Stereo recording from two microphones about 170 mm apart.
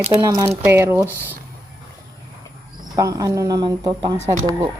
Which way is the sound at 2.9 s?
20° right (ahead or behind).